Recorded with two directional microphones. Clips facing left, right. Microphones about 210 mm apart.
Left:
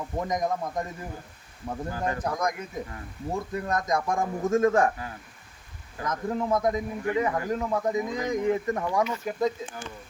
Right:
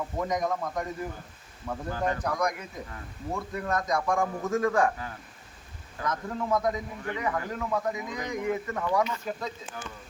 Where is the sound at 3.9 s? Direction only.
25° left (ahead or behind).